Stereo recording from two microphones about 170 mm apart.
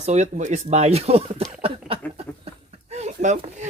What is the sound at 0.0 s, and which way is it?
Speech, 40° right (ahead or behind).